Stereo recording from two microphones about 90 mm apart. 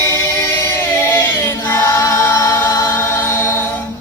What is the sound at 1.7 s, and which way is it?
Choir, 30° left (ahead or behind).